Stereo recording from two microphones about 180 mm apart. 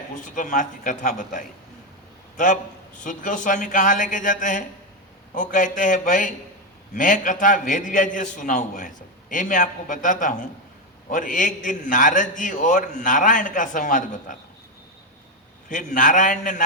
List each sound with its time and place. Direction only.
0.3 s a man's voice: 45° left (ahead or behind)
3.0 s a man's voice: 45° left (ahead or behind)
15.7 s a man's voice: 45° left (ahead or behind)